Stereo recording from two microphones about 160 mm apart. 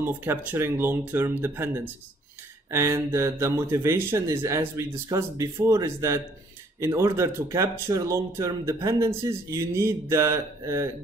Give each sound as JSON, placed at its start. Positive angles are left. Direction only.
{"t": 0.0, "sound": "speech", "side_deg": -15}
{"t": 2.7, "sound": "speech", "side_deg": -15}